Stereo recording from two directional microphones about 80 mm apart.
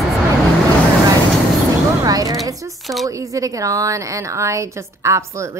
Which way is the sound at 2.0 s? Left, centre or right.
Right.